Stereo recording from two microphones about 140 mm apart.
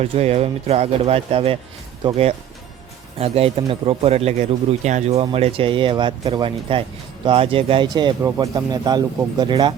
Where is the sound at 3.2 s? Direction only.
45° right (ahead or behind).